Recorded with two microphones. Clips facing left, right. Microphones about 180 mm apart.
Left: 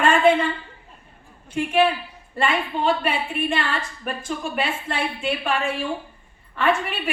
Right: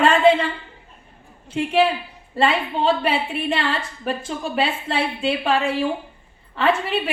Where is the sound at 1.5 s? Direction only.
25° right (ahead or behind).